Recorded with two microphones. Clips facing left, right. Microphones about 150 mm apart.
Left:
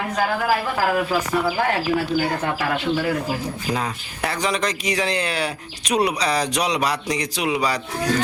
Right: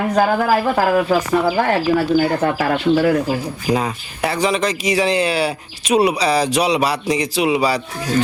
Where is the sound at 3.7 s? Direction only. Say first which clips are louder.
Right 8 dB; 10° right (ahead or behind).